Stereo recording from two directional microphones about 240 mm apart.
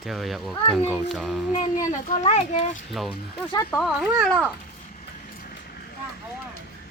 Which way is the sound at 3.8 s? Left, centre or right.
Centre.